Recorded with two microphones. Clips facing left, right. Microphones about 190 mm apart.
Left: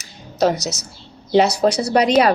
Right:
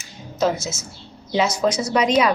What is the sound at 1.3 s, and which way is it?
Speech, 65° left (ahead or behind).